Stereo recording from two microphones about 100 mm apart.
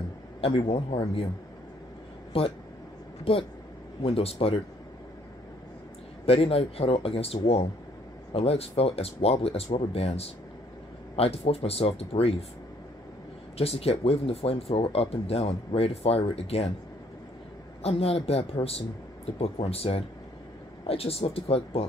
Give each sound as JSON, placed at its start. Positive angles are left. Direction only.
{"t": 0.4, "sound": "speech", "side_deg": 75}
{"t": 2.3, "sound": "speech", "side_deg": 70}
{"t": 6.2, "sound": "speech", "side_deg": 75}
{"t": 13.6, "sound": "speech", "side_deg": 85}
{"t": 17.8, "sound": "speech", "side_deg": 80}